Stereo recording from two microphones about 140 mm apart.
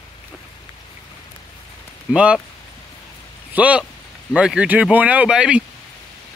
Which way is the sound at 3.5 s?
10° right (ahead or behind).